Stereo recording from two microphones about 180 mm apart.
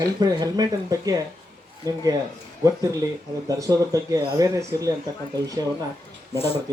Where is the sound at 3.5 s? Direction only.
20° right (ahead or behind).